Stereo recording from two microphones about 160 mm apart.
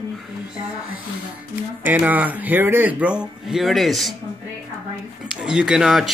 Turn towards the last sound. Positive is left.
turn(degrees=0)  # may be behind; listen again after turning